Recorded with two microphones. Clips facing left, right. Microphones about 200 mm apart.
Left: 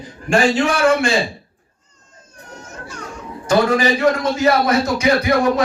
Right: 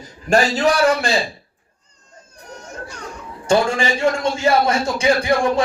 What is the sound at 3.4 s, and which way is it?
A man's voice, 30° right (ahead or behind).